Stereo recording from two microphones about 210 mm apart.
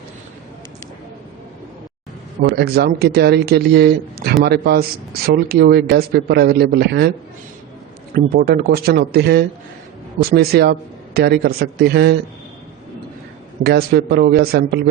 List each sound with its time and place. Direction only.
2.4 s speech: 50° right (ahead or behind)
8.1 s speech: 45° right (ahead or behind)
13.7 s speech: 50° right (ahead or behind)